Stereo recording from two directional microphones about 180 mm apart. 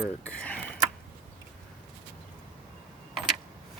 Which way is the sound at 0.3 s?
10° left (ahead or behind).